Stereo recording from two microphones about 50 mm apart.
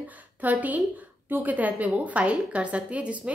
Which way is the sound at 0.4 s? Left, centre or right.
Right.